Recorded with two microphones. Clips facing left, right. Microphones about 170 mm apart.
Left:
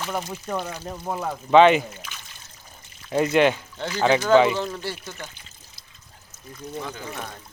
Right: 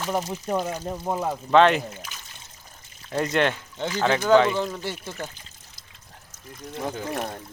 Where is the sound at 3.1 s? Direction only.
5° left (ahead or behind).